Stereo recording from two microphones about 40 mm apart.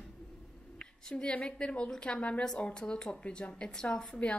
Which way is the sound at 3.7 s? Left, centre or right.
Centre.